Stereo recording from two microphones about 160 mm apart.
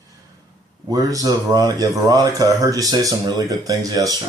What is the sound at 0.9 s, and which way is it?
Speech, 20° right (ahead or behind).